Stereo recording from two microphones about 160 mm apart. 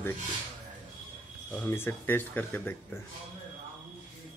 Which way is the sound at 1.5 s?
10° left (ahead or behind).